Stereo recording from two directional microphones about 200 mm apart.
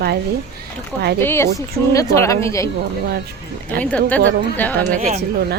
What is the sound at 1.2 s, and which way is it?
A woman's voice, 10° left (ahead or behind).